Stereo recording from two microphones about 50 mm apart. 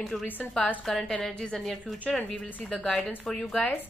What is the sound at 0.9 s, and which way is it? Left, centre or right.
A woman's voice, centre.